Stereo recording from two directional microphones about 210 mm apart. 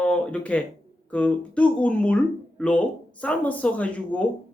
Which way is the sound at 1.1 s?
5° left (ahead or behind).